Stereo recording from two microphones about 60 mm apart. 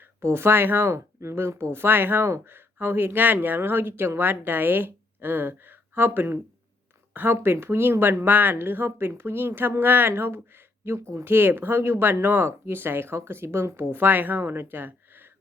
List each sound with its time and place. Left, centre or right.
0.0 s speech: right